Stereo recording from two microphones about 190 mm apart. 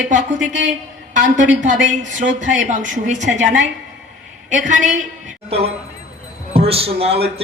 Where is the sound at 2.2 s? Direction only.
40° right (ahead or behind).